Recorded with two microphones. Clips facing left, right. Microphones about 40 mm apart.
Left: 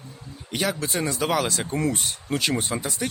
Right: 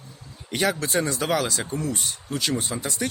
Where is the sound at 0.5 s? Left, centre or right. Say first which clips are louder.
Right 3 dB; centre.